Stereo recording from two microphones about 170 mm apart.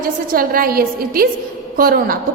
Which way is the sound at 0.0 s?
60° right (ahead or behind).